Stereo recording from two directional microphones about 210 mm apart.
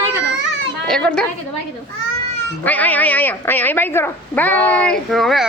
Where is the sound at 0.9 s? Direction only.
5° left (ahead or behind).